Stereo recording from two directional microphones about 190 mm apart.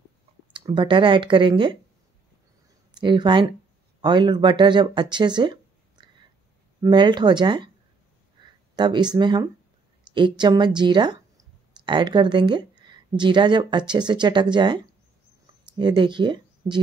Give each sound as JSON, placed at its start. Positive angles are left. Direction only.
{"t": 0.5, "sound": "speech", "side_deg": -25}
{"t": 2.9, "sound": "speech", "side_deg": -25}
{"t": 15.8, "sound": "speech", "side_deg": -25}